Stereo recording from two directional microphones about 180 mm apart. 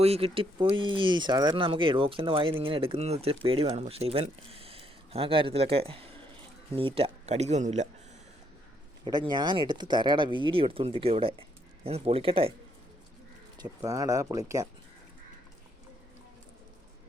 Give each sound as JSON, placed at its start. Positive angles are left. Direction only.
{"t": 0.0, "sound": "speech", "side_deg": -35}
{"t": 9.0, "sound": "speech", "side_deg": -25}
{"t": 13.6, "sound": "speech", "side_deg": -20}